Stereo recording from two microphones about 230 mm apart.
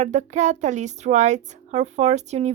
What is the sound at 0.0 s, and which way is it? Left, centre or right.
A woman's voice, right.